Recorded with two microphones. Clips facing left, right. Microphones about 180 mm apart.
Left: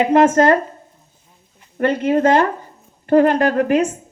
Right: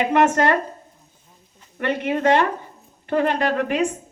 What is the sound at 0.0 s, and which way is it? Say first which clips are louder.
Speech: left 5 dB; 40° left (ahead or behind).